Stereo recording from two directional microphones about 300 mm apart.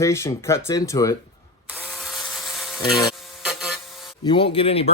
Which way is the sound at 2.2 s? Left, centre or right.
Centre.